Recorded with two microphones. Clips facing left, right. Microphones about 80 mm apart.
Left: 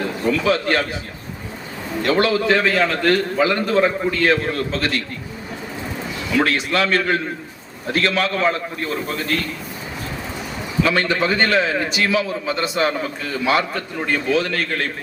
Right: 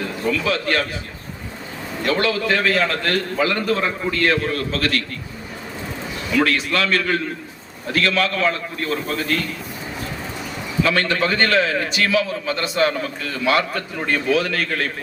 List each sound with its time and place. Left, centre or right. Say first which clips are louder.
0.3 s a man's voice: left 3 dB; left
2.1 s a man's voice: left 4 dB; centre
2.7 s a man's voice: left 2 dB; centre
3.1 s a man's voice: left 3 dB; centre
6.5 s a man's voice: left 1 dB; left
8.9 s a man's voice: right 1 dB; centre
10.8 s a man's voice: left 1 dB; centre